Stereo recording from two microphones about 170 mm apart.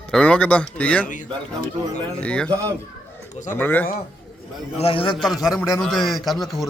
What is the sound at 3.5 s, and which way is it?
Speech, 10° left (ahead or behind).